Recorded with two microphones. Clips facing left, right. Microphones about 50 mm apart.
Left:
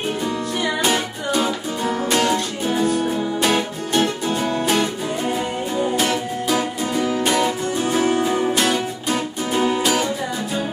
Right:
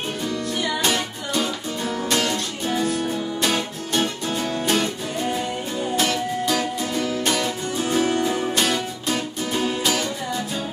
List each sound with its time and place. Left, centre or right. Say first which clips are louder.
0.8 s music: left 3 dB; centre